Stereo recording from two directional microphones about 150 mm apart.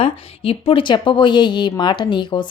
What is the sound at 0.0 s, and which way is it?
A woman's voice, 35° left (ahead or behind).